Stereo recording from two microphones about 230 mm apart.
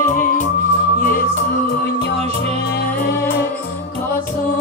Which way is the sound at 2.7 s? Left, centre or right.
Left.